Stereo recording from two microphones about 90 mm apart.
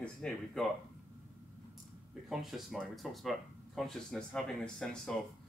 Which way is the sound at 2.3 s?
Centre (ahead or behind).